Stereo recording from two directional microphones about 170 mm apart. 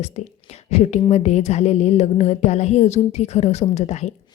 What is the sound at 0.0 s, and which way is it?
Speech, 40° left (ahead or behind).